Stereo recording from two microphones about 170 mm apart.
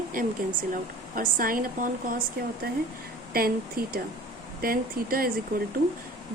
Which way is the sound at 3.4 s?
60° right (ahead or behind).